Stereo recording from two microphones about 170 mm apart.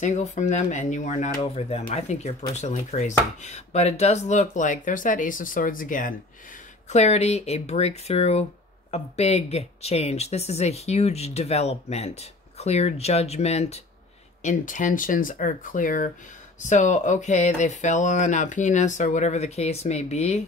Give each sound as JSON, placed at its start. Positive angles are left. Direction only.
{"t": 0.0, "sound": "speech", "side_deg": 45}
{"t": 6.9, "sound": "speech", "side_deg": 40}